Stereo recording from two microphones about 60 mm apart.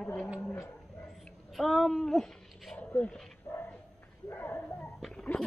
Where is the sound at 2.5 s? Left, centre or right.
Centre.